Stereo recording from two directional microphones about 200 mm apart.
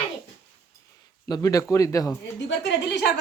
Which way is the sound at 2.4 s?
60° left (ahead or behind).